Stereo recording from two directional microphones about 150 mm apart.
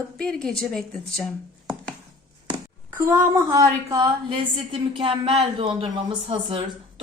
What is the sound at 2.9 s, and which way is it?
Speech, 15° right (ahead or behind).